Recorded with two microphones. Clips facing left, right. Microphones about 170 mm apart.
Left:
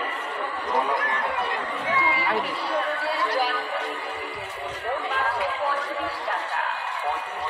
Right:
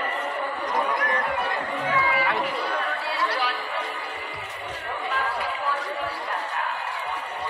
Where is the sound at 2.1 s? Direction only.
30° left (ahead or behind).